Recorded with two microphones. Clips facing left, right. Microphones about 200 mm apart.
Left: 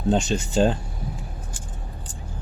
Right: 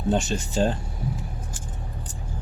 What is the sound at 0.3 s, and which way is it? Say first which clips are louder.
Speech: left 3 dB; centre (ahead or behind).